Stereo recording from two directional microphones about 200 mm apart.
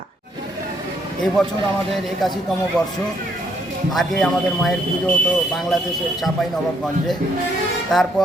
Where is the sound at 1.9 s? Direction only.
Centre (ahead or behind).